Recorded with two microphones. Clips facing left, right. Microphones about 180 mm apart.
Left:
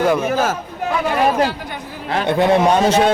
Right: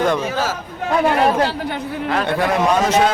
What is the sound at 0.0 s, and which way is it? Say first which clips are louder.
Speech: left 2 dB; 5° left (ahead or behind).